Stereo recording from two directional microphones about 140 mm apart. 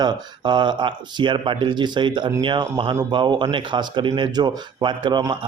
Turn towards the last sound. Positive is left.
turn(degrees=-30)  # may be behind; listen again after turning